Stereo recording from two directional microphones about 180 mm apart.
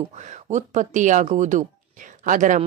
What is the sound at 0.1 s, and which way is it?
Speech, 40° right (ahead or behind).